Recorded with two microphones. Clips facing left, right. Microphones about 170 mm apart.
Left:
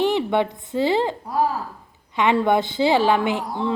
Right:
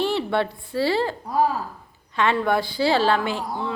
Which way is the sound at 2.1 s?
20° left (ahead or behind).